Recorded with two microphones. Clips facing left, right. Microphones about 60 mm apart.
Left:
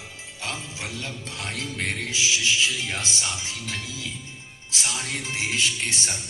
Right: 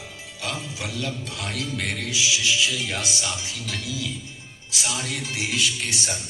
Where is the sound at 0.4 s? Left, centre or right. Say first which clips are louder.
Right 2 dB; left.